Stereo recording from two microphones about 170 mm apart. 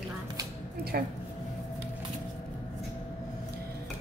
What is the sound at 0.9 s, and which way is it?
Speech, 65° right (ahead or behind).